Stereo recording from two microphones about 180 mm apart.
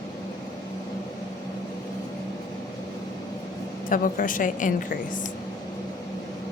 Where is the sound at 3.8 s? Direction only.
50° left (ahead or behind).